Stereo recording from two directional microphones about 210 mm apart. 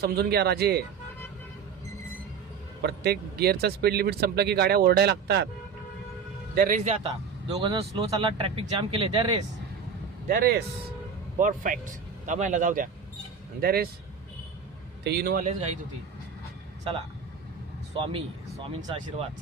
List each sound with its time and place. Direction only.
0.0 s speech: 50° right (ahead or behind)
2.8 s speech: 50° right (ahead or behind)
6.6 s a man's voice: 35° right (ahead or behind)
10.2 s speech: 45° right (ahead or behind)
15.0 s speech: 50° right (ahead or behind)
17.9 s speech: 25° right (ahead or behind)